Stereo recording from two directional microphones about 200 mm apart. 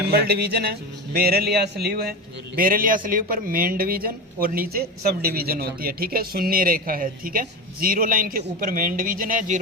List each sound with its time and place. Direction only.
0.1 s a man's voice: 50° right (ahead or behind)